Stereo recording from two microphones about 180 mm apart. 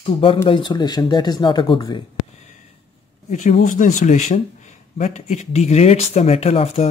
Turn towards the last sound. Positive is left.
turn(degrees=35)  # may be behind; listen again after turning